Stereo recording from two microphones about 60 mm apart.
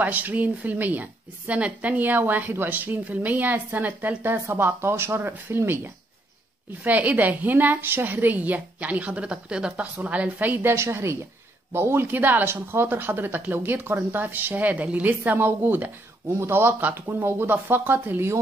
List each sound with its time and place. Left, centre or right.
0.0 s a woman's voice: right
6.8 s a woman's voice: right
10.8 s a woman's voice: right
15.3 s a woman's voice: right